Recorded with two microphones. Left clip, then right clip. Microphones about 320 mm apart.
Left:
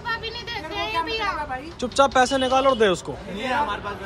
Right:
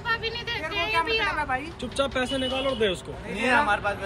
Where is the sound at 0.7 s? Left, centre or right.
Left.